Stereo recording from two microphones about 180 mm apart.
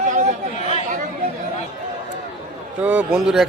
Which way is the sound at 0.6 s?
40° left (ahead or behind).